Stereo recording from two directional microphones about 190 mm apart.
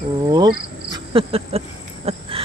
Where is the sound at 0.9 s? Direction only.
25° right (ahead or behind).